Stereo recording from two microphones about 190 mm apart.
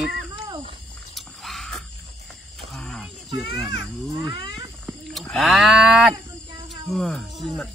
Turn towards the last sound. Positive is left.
turn(degrees=0)  # may be behind; listen again after turning